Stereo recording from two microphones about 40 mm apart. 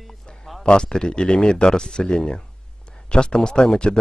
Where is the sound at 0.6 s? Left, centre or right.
Left.